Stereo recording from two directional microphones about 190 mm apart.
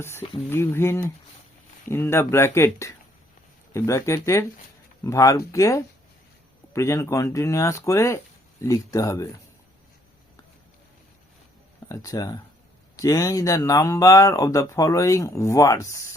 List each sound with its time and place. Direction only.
0.5 s speech: 10° left (ahead or behind)
11.9 s speech: 20° left (ahead or behind)